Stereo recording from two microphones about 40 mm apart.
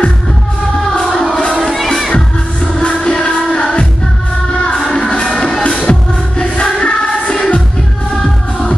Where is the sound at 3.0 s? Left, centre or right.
Left.